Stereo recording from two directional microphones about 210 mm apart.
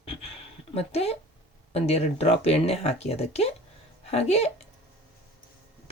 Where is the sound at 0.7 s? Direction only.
30° left (ahead or behind).